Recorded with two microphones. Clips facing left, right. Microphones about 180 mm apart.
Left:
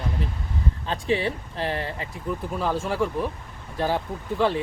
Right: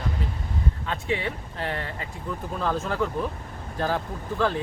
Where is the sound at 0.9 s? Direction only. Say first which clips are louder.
Left 5 dB; 30° left (ahead or behind).